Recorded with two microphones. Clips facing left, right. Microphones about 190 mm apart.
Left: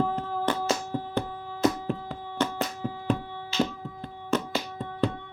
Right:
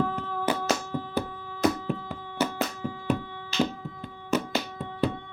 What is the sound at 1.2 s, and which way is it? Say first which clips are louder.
Music: even; 5° right (ahead or behind).